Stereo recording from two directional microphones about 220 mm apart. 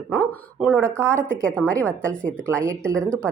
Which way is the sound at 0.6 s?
5° right (ahead or behind).